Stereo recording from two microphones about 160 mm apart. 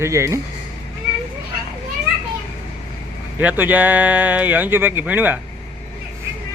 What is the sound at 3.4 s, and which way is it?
Speech, 10° right (ahead or behind).